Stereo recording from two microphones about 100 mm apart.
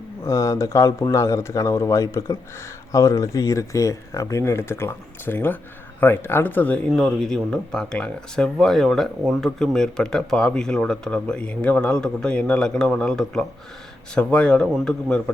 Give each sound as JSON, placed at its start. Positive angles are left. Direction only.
{"t": 0.3, "sound": "speech", "side_deg": 30}
{"t": 6.8, "sound": "speech", "side_deg": 5}